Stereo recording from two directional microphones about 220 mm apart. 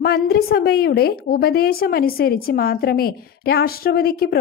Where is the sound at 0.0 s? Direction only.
45° left (ahead or behind).